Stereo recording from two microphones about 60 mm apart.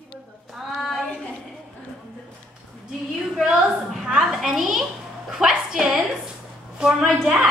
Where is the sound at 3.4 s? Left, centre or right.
Centre.